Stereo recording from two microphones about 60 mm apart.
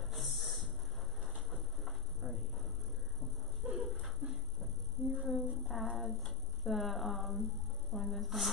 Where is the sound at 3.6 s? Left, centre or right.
Centre.